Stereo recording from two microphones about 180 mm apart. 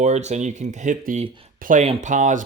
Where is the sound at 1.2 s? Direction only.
30° right (ahead or behind).